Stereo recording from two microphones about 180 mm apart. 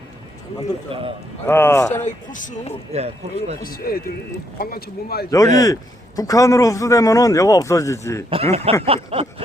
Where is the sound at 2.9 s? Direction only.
35° right (ahead or behind).